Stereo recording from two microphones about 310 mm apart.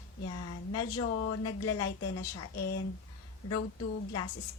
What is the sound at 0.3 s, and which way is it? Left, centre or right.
A woman's voice, left.